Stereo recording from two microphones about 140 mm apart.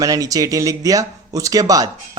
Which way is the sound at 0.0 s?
25° right (ahead or behind).